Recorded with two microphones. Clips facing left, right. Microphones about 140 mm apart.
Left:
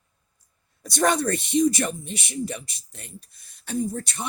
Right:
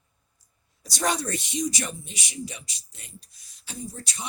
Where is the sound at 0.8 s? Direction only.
55° left (ahead or behind).